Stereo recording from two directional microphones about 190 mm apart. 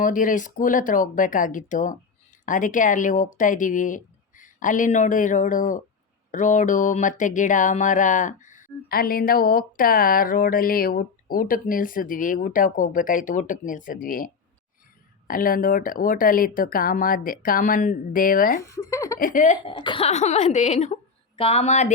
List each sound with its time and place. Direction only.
0.0 s speech: 45° left (ahead or behind)
15.3 s speech: 50° left (ahead or behind)
18.7 s speech: 15° left (ahead or behind)
19.2 s speech: 45° left (ahead or behind)
19.6 s a woman's voice: 25° left (ahead or behind)